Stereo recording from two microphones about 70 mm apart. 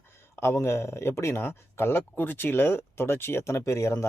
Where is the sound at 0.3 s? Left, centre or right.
Left.